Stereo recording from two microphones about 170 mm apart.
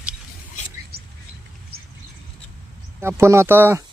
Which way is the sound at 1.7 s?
65° right (ahead or behind).